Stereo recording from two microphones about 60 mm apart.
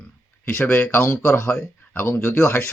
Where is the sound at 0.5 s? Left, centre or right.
Left.